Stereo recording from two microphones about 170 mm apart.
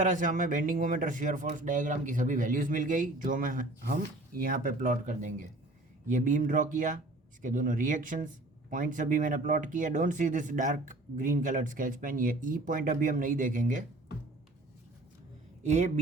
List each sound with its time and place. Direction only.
0.0 s speech: 50° right (ahead or behind)
15.6 s speech: 45° right (ahead or behind)